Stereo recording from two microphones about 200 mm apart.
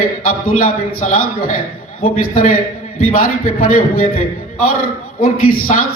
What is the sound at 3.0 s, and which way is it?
Speech, 45° left (ahead or behind).